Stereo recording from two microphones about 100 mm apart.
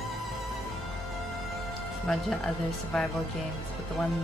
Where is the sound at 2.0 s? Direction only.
5° left (ahead or behind).